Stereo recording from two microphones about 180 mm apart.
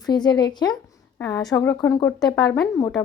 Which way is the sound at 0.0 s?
20° left (ahead or behind).